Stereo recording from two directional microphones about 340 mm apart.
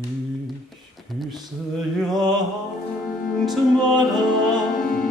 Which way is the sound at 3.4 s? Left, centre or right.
Centre.